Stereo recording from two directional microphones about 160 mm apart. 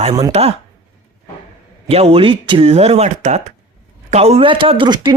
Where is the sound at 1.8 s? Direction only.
35° right (ahead or behind).